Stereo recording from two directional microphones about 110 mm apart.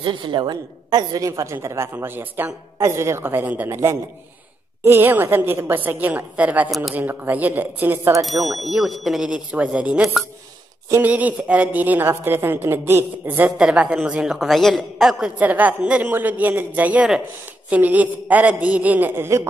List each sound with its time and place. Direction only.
0.0 s a woman's voice: 45° right (ahead or behind); by 3.7 s 15° right (ahead or behind)
3.7 s a woman's voice: 30° right (ahead or behind); by 6.7 s 15° right (ahead or behind)
6.7 s speech: centre (ahead or behind)
7.0 s a woman's voice: 15° right (ahead or behind)
8.5 s a woman's voice: centre (ahead or behind); by 19.4 s 20° right (ahead or behind)